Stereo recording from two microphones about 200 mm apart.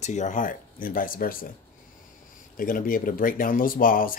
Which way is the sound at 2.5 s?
45° left (ahead or behind).